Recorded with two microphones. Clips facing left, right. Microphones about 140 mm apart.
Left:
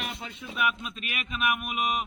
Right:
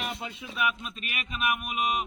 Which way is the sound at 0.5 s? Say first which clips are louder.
Left 1 dB; centre (ahead or behind).